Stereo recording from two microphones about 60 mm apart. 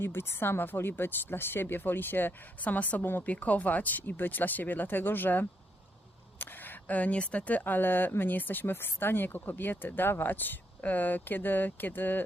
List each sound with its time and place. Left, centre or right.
0.0 s speech: left
3.0 s speech: left